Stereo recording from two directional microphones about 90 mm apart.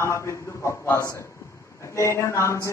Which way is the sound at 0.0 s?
30° left (ahead or behind).